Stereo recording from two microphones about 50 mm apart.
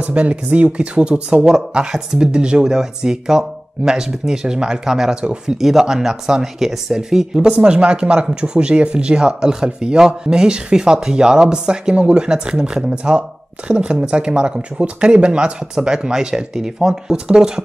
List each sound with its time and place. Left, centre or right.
0.0 s speech: right